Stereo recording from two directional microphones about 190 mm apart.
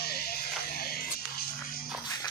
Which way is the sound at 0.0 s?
55° left (ahead or behind).